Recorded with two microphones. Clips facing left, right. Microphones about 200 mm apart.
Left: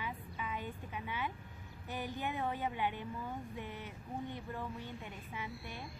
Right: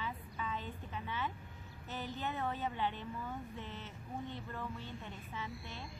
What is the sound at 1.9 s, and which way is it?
A woman's voice, 15° left (ahead or behind).